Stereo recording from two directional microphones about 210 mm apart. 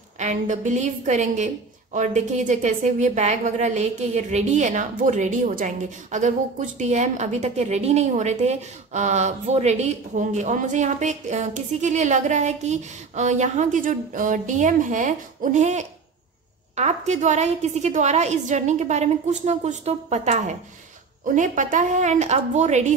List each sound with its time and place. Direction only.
0.2 s a woman's voice: 35° right (ahead or behind)